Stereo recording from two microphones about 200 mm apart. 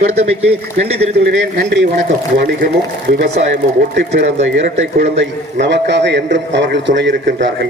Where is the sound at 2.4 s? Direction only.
45° right (ahead or behind).